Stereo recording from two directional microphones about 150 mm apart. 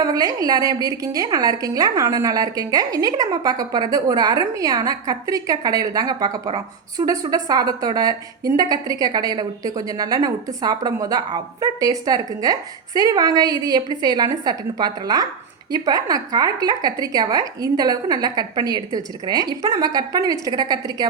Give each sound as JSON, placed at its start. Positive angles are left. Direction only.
{"t": 0.0, "sound": "a woman's voice", "side_deg": -25}